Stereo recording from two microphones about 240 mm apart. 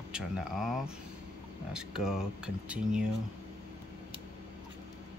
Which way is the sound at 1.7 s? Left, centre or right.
Centre.